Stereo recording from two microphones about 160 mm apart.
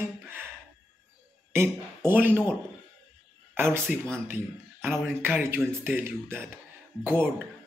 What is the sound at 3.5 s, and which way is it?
Speech, 15° right (ahead or behind).